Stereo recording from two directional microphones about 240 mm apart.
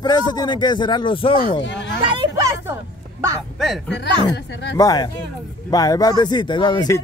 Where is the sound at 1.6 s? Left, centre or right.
Left.